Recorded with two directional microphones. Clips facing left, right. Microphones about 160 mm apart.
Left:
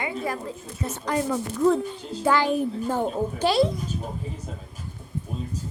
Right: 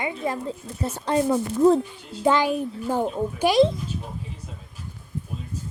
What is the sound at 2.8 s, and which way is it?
Speech, 5° right (ahead or behind).